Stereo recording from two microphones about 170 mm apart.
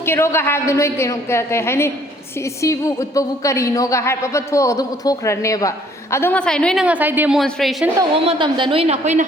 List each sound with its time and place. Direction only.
0.0 s a woman's voice: 15° left (ahead or behind)
6.8 s speech: 10° right (ahead or behind)
7.3 s speech: centre (ahead or behind)
8.1 s a woman's voice: 35° right (ahead or behind)